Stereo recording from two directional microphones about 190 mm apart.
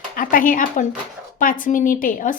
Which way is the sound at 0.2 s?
45° left (ahead or behind).